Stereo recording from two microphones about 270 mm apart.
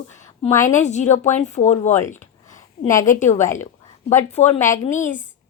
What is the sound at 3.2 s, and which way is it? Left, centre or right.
Speech, left.